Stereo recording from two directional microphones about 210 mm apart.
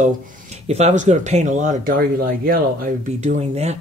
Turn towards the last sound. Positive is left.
turn(degrees=-30)  # may be behind; listen again after turning